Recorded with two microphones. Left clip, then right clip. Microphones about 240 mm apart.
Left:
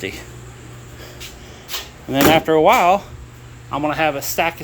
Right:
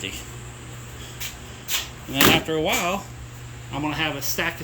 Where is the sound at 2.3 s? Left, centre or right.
Centre.